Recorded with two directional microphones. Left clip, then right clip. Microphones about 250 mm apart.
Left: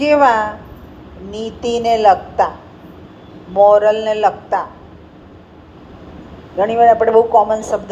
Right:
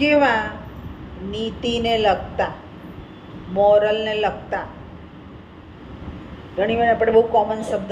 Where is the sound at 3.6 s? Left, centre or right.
Left.